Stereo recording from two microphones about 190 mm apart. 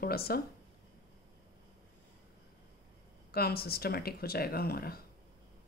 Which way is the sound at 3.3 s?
55° left (ahead or behind).